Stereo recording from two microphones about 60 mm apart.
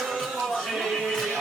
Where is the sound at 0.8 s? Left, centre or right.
Centre.